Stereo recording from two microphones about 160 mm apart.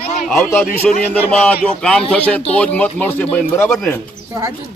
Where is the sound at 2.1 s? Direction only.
10° left (ahead or behind).